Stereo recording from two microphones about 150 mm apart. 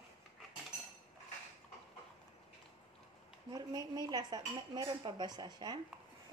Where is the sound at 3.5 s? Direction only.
25° right (ahead or behind).